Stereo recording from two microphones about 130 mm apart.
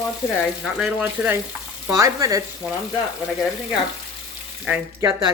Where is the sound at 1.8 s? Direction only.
25° right (ahead or behind).